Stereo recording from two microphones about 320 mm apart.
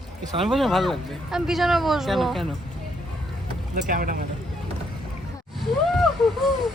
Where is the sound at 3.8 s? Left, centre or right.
Right.